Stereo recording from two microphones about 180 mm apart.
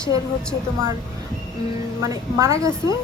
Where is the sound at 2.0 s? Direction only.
15° right (ahead or behind).